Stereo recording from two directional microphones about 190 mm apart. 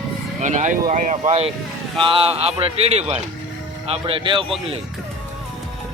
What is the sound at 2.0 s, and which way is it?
Speech, 25° right (ahead or behind).